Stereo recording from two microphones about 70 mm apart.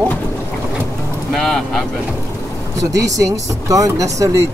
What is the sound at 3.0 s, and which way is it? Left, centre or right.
Speech, right.